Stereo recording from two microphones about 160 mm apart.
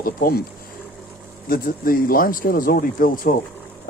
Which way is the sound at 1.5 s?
65° left (ahead or behind).